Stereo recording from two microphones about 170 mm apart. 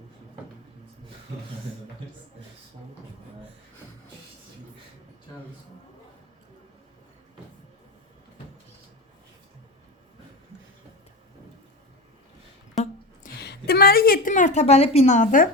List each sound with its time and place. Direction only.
13.4 s a woman's voice: 70° left (ahead or behind); by 15.4 s 50° left (ahead or behind)